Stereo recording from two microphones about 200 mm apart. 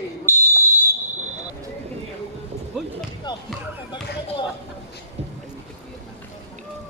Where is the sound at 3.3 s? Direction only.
20° left (ahead or behind).